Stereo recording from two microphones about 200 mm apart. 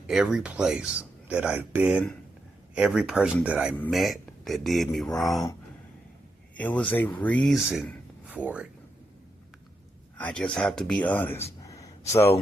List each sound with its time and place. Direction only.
0.1 s speech: 5° right (ahead or behind)
6.6 s speech: 5° left (ahead or behind)
10.2 s speech: 5° left (ahead or behind)
11.6 s a sound: 15° left (ahead or behind)